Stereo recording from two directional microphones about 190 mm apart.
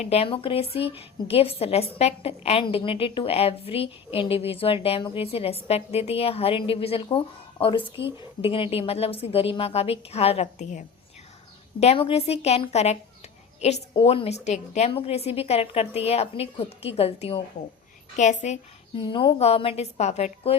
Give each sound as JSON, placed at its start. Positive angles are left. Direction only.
{"t": 0.0, "sound": "a woman's voice", "side_deg": 30}
{"t": 19.0, "sound": "a woman's voice", "side_deg": 25}